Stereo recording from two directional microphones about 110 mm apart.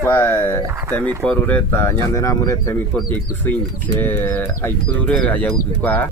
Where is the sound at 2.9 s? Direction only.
15° left (ahead or behind).